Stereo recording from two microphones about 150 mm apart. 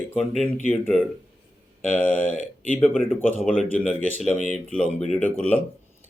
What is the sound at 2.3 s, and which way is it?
Speech, 55° left (ahead or behind).